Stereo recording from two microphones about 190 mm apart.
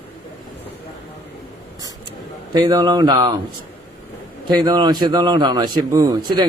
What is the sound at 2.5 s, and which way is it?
Speech, 20° right (ahead or behind).